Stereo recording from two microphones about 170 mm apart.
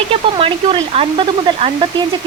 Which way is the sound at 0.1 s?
30° right (ahead or behind).